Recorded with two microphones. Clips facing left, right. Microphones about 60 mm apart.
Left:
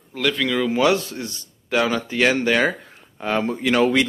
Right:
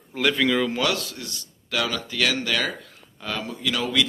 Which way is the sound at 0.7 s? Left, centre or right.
Left.